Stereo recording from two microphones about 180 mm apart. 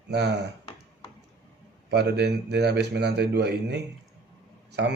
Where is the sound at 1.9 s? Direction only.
70° right (ahead or behind).